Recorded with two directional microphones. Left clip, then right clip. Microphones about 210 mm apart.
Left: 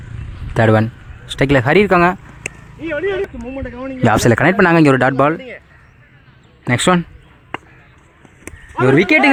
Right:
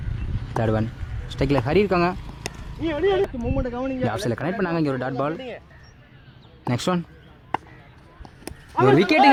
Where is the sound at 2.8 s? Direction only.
Centre (ahead or behind).